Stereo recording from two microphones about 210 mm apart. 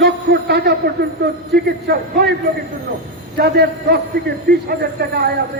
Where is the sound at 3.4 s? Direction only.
50° right (ahead or behind).